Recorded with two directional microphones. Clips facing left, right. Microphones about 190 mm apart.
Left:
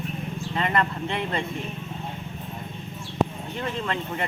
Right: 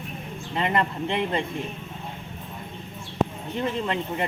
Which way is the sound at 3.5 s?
25° right (ahead or behind).